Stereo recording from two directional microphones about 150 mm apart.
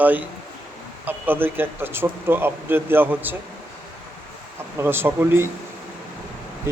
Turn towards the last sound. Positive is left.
turn(degrees=-15)  # may be behind; listen again after turning